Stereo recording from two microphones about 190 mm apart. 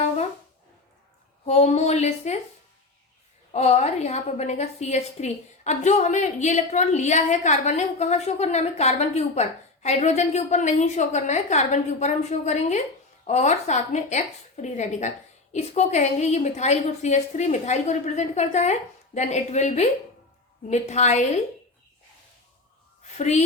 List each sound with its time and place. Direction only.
1.5 s a woman's voice: 35° left (ahead or behind)
3.5 s a woman's voice: 35° left (ahead or behind)
23.1 s a woman's voice: 35° left (ahead or behind)